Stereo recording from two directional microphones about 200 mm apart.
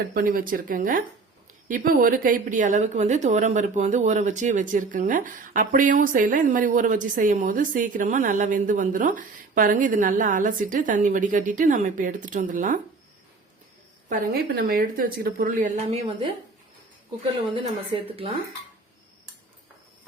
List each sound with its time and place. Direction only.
0.1 s a woman's voice: 45° right (ahead or behind)
14.1 s speech: 45° right (ahead or behind)